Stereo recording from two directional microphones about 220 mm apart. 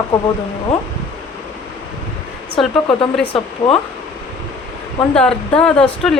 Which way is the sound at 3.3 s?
25° left (ahead or behind).